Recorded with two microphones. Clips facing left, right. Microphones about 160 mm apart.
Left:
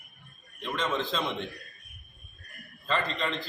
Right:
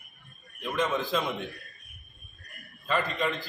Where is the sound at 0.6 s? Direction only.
10° right (ahead or behind).